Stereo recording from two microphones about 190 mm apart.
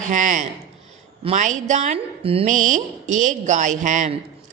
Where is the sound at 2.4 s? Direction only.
40° right (ahead or behind).